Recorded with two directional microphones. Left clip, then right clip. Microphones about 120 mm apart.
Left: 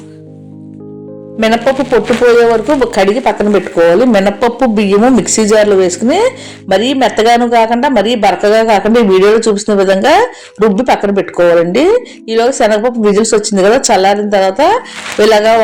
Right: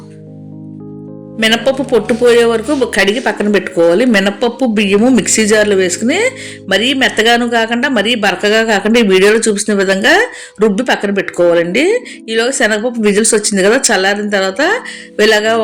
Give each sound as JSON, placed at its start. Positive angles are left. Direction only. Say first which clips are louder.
{"t": 1.4, "sound": "a man's voice", "louder": "left 2 dB", "side_deg": -20}